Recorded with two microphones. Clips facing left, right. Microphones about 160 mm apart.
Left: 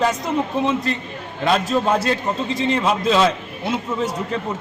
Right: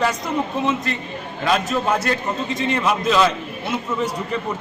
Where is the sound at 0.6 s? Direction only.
30° left (ahead or behind).